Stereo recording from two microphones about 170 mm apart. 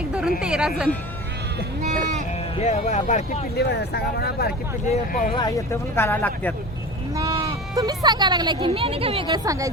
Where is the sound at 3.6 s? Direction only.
70° left (ahead or behind).